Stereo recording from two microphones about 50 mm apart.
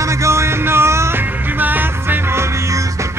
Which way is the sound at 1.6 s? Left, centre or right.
Right.